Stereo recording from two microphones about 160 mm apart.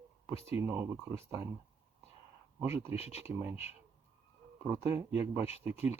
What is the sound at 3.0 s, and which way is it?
Speech, 40° left (ahead or behind).